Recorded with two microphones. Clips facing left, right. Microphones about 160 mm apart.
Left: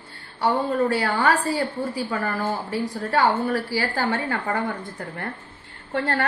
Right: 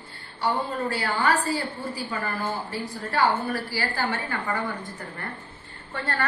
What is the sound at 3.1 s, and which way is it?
A woman's voice, 65° left (ahead or behind).